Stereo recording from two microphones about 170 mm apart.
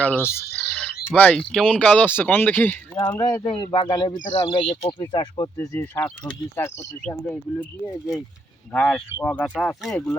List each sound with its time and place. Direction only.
0.0 s a sound: 10° left (ahead or behind)
1.3 s speech: centre (ahead or behind); by 5.5 s 30° left (ahead or behind)
5.5 s speech: 10° left (ahead or behind)